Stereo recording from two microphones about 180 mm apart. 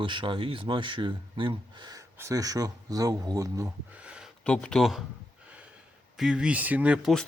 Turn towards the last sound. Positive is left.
turn(degrees=-5)  # may be behind; listen again after turning